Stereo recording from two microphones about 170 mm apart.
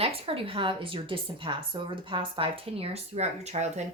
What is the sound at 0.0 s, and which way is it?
A woman's voice, 35° right (ahead or behind).